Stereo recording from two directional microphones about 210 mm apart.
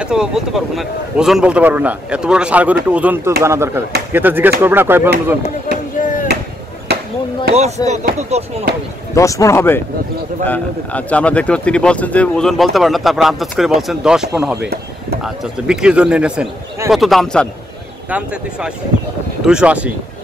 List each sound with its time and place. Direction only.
0.0 s speech: 5° right (ahead or behind)
5.9 s chop: 40° left (ahead or behind)
7.5 s speech: 30° right (ahead or behind)
9.1 s speech: 15° left (ahead or behind)
19.4 s speech: 5° right (ahead or behind)